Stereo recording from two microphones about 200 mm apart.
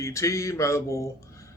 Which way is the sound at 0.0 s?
15° left (ahead or behind).